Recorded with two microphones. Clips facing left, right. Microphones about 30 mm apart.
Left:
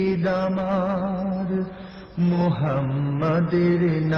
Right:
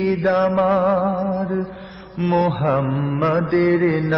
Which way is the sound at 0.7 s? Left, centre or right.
Right.